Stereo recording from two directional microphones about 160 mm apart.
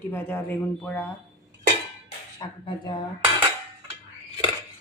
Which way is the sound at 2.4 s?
30° left (ahead or behind).